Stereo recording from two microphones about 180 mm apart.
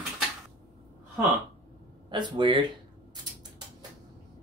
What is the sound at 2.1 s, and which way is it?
Speech, 25° right (ahead or behind).